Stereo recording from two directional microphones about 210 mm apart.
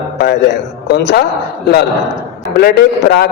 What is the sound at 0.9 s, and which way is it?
Speech, 50° left (ahead or behind).